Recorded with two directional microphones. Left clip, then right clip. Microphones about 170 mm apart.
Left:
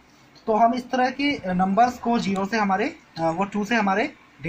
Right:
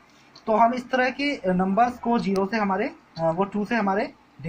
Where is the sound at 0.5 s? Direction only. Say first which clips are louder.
Even; 25° right (ahead or behind).